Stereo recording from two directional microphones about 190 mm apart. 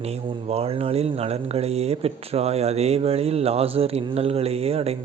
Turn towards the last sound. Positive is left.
turn(degrees=-30)  # may be behind; listen again after turning